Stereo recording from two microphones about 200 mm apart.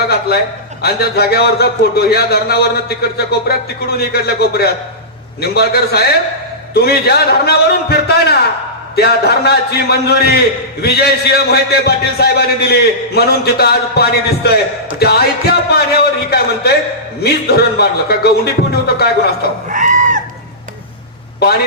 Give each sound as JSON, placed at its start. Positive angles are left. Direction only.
{"t": 0.1, "sound": "a man's voice", "side_deg": 55}
{"t": 19.6, "sound": "goat", "side_deg": -40}